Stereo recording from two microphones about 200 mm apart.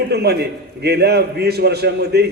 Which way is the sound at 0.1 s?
55° right (ahead or behind).